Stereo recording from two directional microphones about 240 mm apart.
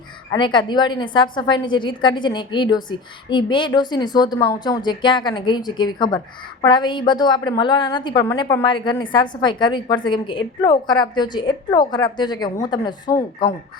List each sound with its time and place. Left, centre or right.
0.3 s a woman's voice: centre